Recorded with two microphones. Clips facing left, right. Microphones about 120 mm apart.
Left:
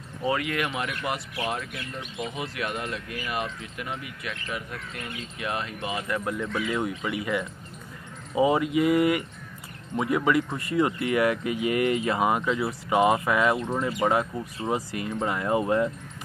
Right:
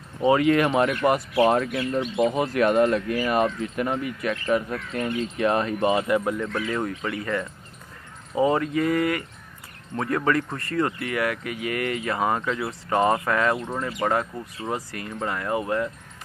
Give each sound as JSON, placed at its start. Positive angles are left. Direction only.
{"t": 0.2, "sound": "speech", "side_deg": -30}
{"t": 6.2, "sound": "speech", "side_deg": 0}